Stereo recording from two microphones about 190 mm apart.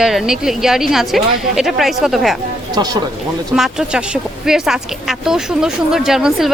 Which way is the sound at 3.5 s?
Centre (ahead or behind).